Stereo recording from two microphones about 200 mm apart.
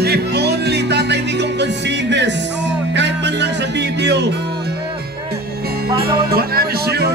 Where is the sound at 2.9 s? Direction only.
60° right (ahead or behind).